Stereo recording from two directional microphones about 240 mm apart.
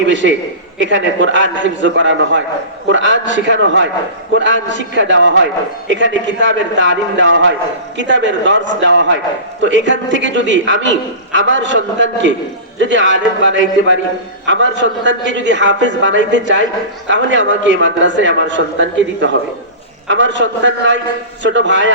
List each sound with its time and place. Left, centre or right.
0.0 s a man's voice: right